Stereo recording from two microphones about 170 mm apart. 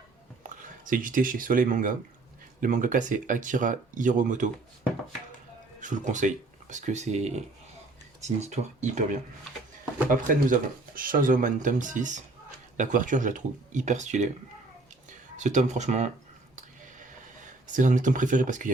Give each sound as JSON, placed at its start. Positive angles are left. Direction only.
{"t": 0.4, "sound": "speech", "side_deg": -50}
{"t": 5.8, "sound": "speech", "side_deg": -45}
{"t": 10.1, "sound": "speech", "side_deg": -50}
{"t": 15.4, "sound": "speech", "side_deg": -45}
{"t": 17.4, "sound": "speech", "side_deg": -50}